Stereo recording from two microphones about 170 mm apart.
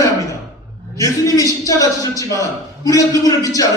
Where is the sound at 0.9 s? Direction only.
20° left (ahead or behind).